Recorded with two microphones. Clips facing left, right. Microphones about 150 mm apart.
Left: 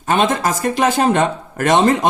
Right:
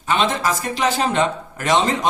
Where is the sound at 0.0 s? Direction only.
45° left (ahead or behind).